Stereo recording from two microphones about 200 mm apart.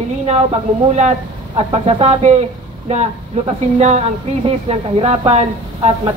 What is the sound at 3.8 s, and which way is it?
Speech, 35° right (ahead or behind).